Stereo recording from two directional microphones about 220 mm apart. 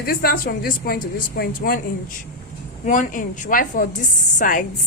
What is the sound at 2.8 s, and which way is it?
A woman's voice, 35° left (ahead or behind).